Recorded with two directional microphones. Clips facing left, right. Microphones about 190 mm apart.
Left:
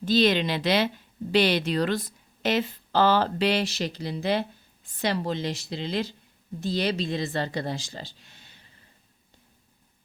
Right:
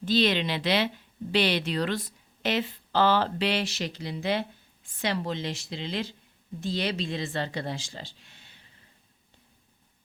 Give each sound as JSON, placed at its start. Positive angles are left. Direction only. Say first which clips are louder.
{"t": 0.0, "sound": "a woman's voice", "louder": "left 3 dB", "side_deg": 45}